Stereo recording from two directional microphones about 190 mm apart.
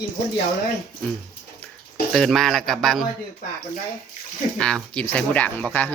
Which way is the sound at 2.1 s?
Centre (ahead or behind).